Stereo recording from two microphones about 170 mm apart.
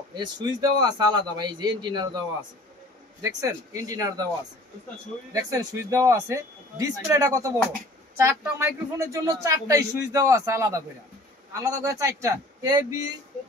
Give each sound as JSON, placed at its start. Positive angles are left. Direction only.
{"t": 0.2, "sound": "speech", "side_deg": -25}
{"t": 3.2, "sound": "speech", "side_deg": -20}
{"t": 5.3, "sound": "speech", "side_deg": -20}